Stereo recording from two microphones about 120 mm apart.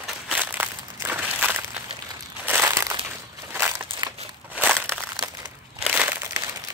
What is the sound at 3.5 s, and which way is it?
Crushing, 20° right (ahead or behind).